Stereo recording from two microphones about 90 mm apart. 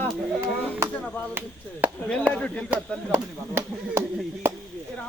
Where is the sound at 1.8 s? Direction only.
20° right (ahead or behind).